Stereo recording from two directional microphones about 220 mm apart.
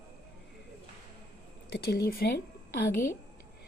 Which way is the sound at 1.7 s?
45° left (ahead or behind).